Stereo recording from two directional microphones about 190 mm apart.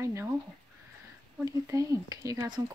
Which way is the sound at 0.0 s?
15° right (ahead or behind).